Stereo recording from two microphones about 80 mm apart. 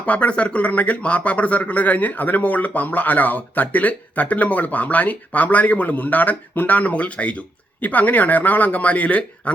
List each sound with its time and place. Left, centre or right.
0.0 s speech: centre